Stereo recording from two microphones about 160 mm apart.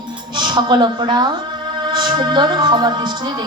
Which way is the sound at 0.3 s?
30° right (ahead or behind).